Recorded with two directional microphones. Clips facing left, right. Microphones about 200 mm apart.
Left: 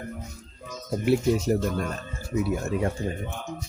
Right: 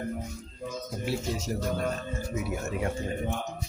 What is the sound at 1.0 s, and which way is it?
Speech, 60° left (ahead or behind).